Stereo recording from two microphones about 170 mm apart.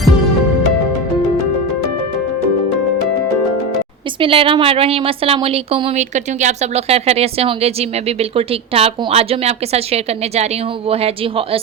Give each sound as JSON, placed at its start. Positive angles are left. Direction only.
{"t": 4.2, "sound": "speech", "side_deg": -30}